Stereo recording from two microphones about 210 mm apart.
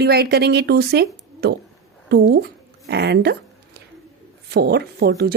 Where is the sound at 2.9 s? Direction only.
50° right (ahead or behind).